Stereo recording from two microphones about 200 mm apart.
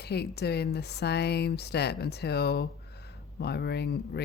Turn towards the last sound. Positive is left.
turn(degrees=55)  # may be behind; listen again after turning